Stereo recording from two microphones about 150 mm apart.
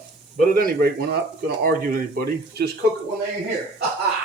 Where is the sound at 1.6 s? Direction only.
75° right (ahead or behind).